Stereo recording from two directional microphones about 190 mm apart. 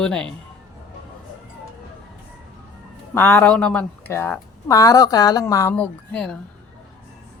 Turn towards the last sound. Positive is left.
turn(degrees=5)  # may be behind; listen again after turning